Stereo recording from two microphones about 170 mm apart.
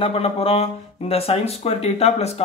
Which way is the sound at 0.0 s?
35° left (ahead or behind).